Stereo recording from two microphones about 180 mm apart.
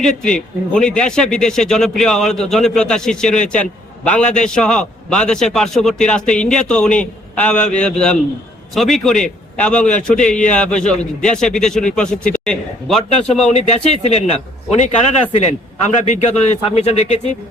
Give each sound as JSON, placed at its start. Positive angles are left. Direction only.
{"t": 0.0, "sound": "speech", "side_deg": 5}
{"t": 13.5, "sound": "speech", "side_deg": 35}